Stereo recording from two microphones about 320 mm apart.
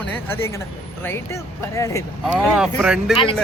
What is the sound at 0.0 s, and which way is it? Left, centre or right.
Speech, centre.